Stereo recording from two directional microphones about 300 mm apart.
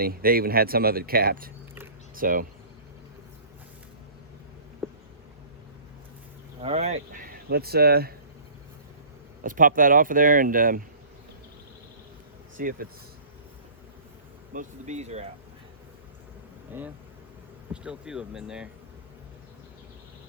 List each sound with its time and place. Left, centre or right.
0.0 s speech: right
4.8 s a sound: centre
6.6 s speech: centre
9.4 s speech: right
12.5 s speech: right
14.5 s speech: right
17.8 s speech: centre